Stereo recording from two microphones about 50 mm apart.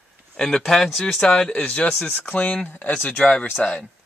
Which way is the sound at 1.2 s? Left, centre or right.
Centre.